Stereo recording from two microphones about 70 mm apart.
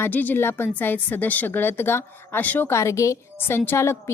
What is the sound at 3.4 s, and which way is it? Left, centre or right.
Speech, left.